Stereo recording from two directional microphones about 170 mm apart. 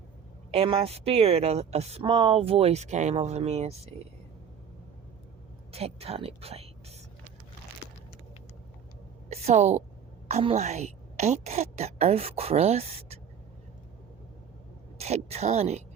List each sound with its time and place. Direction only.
0.5 s a woman's voice: 30° right (ahead or behind)
5.7 s speech: 35° right (ahead or behind)
9.3 s a woman's voice: 40° right (ahead or behind)
14.9 s a woman's voice: 40° right (ahead or behind)